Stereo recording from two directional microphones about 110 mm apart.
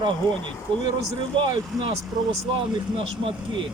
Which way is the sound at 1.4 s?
50° right (ahead or behind).